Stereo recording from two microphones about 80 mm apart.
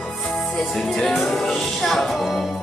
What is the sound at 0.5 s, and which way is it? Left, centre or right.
Music, centre.